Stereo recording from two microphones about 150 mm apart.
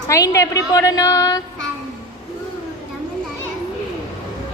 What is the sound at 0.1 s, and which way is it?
A woman's voice, 20° left (ahead or behind).